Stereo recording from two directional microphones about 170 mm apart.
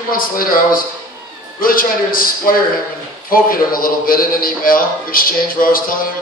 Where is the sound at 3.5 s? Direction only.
55° left (ahead or behind).